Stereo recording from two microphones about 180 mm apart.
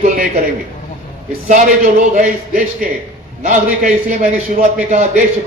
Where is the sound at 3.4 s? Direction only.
45° right (ahead or behind).